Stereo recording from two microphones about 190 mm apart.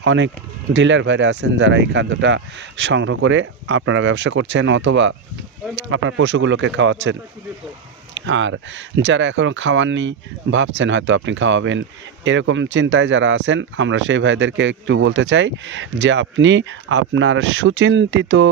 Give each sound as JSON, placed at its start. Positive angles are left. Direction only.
{"t": 0.0, "sound": "speech", "side_deg": -75}
{"t": 5.7, "sound": "speech", "side_deg": -85}